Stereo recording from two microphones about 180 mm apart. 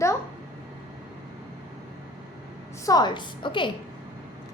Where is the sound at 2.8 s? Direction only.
20° left (ahead or behind).